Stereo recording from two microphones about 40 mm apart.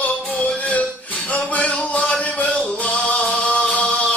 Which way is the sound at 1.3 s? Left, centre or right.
Left.